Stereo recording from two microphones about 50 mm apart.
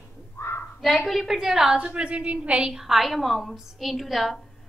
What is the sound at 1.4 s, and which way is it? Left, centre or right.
Speech, centre.